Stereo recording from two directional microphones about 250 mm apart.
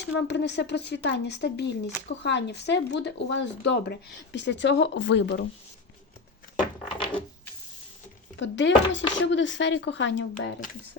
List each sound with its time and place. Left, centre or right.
0.0 s speech: left
8.4 s speech: left